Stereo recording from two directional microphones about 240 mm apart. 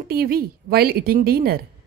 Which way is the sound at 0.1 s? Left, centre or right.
Right.